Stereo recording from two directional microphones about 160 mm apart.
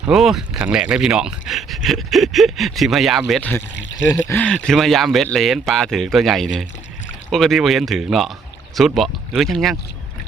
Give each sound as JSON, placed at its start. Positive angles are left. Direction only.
{"t": 0.1, "sound": "speech", "side_deg": 0}
{"t": 4.1, "sound": "speech", "side_deg": 15}
{"t": 4.4, "sound": "speech", "side_deg": 5}